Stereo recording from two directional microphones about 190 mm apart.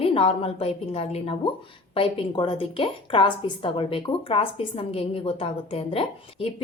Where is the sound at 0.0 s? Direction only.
30° left (ahead or behind).